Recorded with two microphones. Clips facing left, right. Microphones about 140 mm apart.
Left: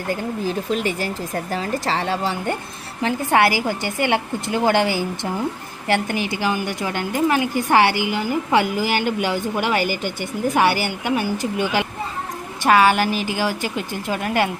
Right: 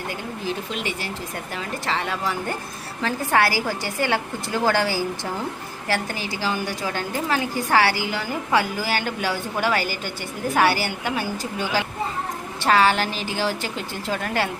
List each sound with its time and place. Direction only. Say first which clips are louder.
0.7 s a woman's voice: left 6 dB; 45° left (ahead or behind); by 14.5 s 15° left (ahead or behind)